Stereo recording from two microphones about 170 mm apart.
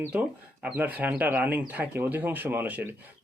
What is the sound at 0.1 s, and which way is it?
Speech, 10° right (ahead or behind).